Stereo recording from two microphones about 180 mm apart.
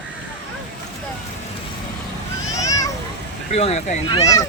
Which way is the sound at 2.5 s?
20° left (ahead or behind).